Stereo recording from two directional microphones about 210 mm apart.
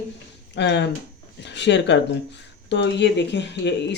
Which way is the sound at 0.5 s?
55° left (ahead or behind).